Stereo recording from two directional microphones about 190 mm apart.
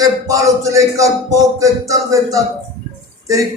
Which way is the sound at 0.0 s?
15° right (ahead or behind).